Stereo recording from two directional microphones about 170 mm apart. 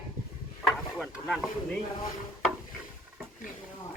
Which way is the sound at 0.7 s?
Centre (ahead or behind).